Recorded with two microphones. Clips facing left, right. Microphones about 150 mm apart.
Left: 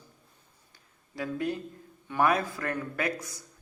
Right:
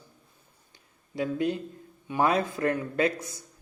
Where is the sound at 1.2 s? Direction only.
20° right (ahead or behind).